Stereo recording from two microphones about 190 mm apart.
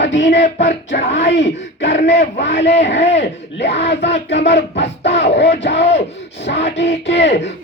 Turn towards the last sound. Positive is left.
turn(degrees=65)  # may be behind; listen again after turning